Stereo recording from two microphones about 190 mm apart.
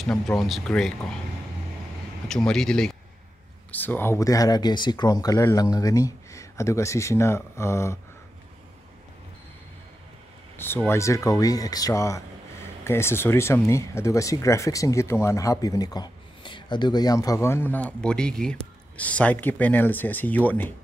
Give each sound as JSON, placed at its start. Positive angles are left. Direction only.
{"t": 0.0, "sound": "speech", "side_deg": 0}
{"t": 2.2, "sound": "speech", "side_deg": 5}
{"t": 10.6, "sound": "speech", "side_deg": 10}